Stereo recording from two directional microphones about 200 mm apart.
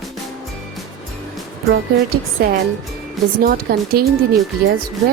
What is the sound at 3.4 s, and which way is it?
Speech, 45° right (ahead or behind).